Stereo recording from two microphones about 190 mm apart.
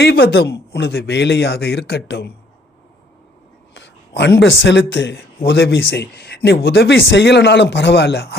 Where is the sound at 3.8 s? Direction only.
70° left (ahead or behind).